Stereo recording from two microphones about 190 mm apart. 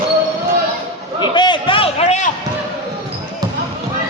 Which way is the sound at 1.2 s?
25° left (ahead or behind).